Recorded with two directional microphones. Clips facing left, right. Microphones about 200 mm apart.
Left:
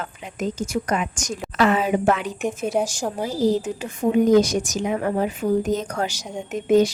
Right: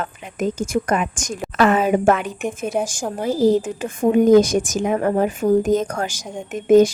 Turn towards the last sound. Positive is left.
turn(degrees=-50)  # may be behind; listen again after turning